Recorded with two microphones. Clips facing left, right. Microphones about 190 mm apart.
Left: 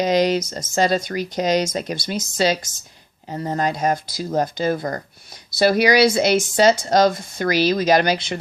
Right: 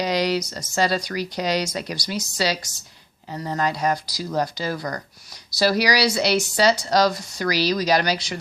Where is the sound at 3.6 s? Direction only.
20° left (ahead or behind).